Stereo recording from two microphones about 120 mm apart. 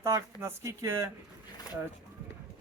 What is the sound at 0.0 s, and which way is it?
Speech, 25° right (ahead or behind).